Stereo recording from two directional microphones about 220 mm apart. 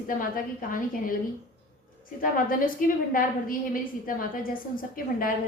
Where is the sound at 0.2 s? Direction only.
40° left (ahead or behind).